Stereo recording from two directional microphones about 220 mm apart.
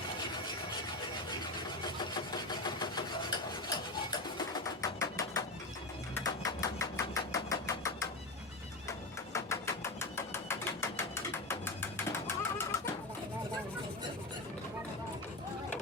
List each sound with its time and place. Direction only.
1.8 s vehicle: 20° left (ahead or behind)
6.1 s engine: 15° left (ahead or behind)
8.9 s a sound: 15° left (ahead or behind)